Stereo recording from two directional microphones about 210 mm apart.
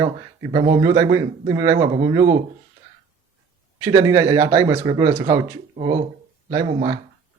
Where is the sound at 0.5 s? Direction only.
20° right (ahead or behind).